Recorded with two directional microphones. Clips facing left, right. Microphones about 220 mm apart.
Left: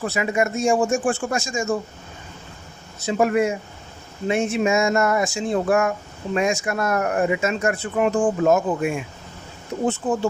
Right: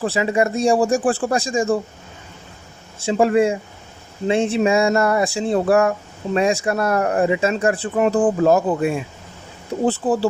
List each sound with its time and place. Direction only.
0.0 s speech: 30° right (ahead or behind)
3.0 s speech: 30° right (ahead or behind)